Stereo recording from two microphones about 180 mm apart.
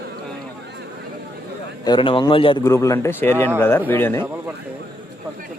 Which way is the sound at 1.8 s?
25° left (ahead or behind).